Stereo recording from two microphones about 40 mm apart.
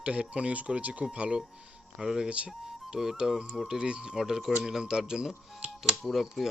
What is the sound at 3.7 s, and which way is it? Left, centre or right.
Speech, right.